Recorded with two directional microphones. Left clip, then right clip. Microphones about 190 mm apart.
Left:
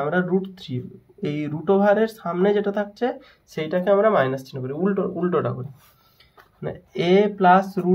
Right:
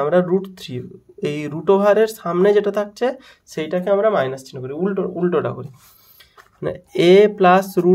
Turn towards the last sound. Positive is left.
turn(degrees=-55)  # may be behind; listen again after turning